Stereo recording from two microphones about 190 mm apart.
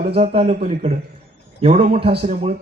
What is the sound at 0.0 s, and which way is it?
A man's voice, 35° right (ahead or behind).